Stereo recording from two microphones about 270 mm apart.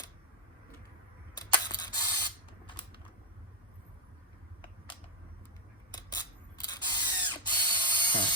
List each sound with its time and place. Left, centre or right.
1.4 s spray: centre
5.9 s scissors: centre
6.7 s ratchet: centre